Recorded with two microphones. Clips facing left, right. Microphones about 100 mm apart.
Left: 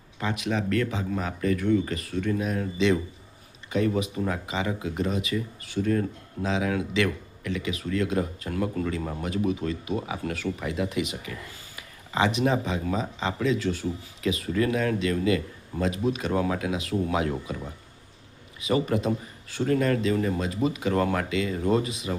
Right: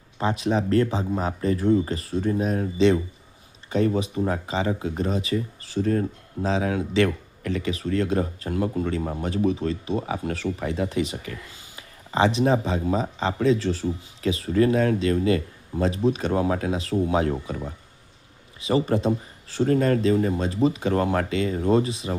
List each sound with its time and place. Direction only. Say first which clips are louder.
0.2 s speech: right 5 dB; 30° right (ahead or behind)